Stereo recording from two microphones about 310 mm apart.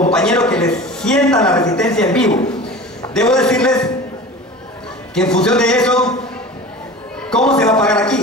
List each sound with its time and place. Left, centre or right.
0.1 s a man's voice: centre
3.2 s a man's voice: centre
5.1 s a man's voice: centre
7.2 s a man's voice: centre